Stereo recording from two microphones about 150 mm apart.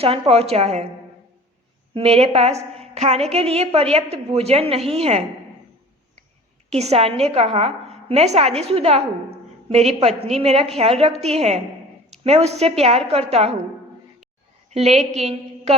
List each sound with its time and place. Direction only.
0.0 s a woman's voice: 40° right (ahead or behind)
1.9 s a woman's voice: 40° right (ahead or behind)
6.7 s a woman's voice: 45° right (ahead or behind)
14.7 s a woman's voice: 45° right (ahead or behind)